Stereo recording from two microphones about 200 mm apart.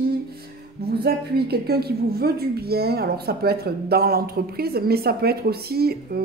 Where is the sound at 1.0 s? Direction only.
50° right (ahead or behind).